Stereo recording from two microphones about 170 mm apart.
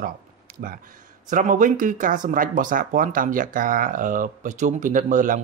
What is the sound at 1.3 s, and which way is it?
Speech, 50° right (ahead or behind).